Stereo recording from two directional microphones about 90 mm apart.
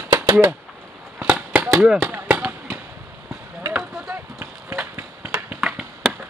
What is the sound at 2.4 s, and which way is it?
Fireworks, 20° right (ahead or behind).